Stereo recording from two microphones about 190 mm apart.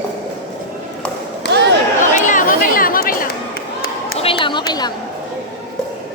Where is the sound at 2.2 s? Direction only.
45° left (ahead or behind).